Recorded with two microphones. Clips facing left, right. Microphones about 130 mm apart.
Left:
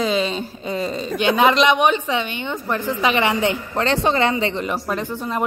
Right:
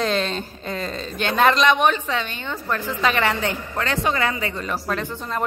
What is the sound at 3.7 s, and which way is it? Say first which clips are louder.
Speech: left 4 dB; 30° left (ahead or behind).